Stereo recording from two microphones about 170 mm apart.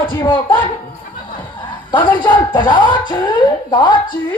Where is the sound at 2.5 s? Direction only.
25° left (ahead or behind).